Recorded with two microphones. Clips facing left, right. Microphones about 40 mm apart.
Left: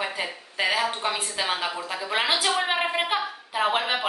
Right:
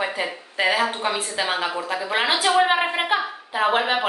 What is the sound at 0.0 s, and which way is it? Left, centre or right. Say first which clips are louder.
A woman's voice: right 4 dB; centre.